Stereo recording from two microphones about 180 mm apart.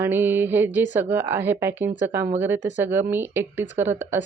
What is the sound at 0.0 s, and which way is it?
Speech, 10° right (ahead or behind).